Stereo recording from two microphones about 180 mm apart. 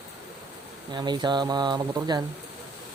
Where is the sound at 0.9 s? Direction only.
25° right (ahead or behind).